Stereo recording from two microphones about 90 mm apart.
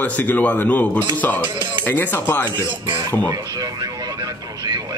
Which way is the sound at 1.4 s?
60° right (ahead or behind).